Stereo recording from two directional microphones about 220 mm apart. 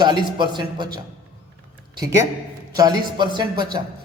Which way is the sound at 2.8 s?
20° right (ahead or behind).